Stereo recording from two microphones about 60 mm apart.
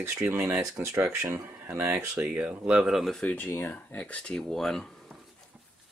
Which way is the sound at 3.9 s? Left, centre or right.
Left.